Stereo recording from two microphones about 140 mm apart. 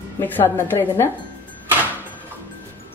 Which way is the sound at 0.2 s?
15° left (ahead or behind).